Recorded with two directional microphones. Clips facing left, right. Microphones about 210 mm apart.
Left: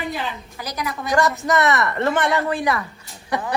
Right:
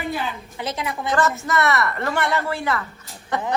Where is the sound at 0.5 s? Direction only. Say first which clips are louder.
Right 2 dB; 25° right (ahead or behind).